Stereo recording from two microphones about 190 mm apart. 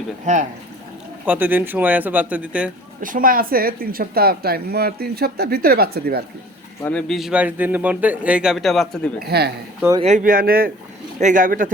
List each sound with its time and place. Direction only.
0.3 s speech: 40° right (ahead or behind)
1.2 s speech: 10° right (ahead or behind)
3.0 s speech: 45° right (ahead or behind)
6.8 s a man's voice: 5° left (ahead or behind)
9.2 s speech: 55° right (ahead or behind)
10.0 s speech: 40° right (ahead or behind)